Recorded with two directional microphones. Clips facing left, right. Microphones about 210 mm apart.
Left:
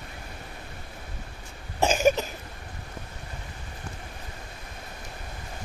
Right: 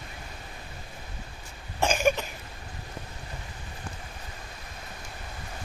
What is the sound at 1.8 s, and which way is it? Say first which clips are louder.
Cough: left 3 dB; 40° left (ahead or behind).